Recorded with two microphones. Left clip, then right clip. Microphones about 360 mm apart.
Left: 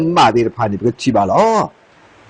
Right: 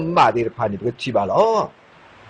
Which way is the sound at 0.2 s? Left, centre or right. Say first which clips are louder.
Left 3 dB; left.